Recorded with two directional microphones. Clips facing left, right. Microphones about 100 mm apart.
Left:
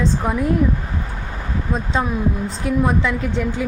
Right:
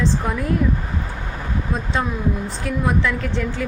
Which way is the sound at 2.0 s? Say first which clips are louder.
Left 2 dB; 20° left (ahead or behind).